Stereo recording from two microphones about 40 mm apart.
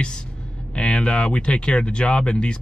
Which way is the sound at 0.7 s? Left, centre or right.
Left.